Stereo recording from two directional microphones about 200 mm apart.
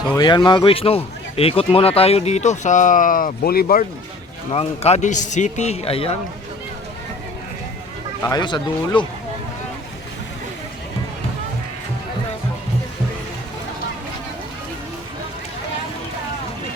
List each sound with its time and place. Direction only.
0.2 s speech: 20° left (ahead or behind); by 3.8 s 50° left (ahead or behind)
4.5 s speech: 30° left (ahead or behind)
8.2 s speech: 20° left (ahead or behind)